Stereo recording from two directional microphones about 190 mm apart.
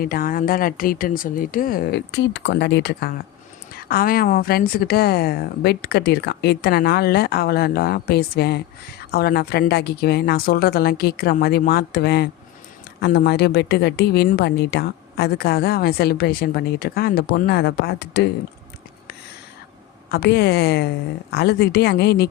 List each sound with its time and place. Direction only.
0.0 s speech: 50° left (ahead or behind)
2.1 s speech: 70° left (ahead or behind)
3.8 s a woman's voice: 50° left (ahead or behind)
20.1 s a woman's voice: 55° left (ahead or behind)